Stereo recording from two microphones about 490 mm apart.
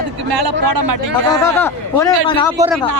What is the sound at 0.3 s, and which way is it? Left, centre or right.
Speech, right.